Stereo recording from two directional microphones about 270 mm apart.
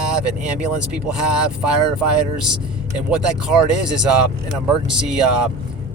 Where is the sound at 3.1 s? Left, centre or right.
Centre.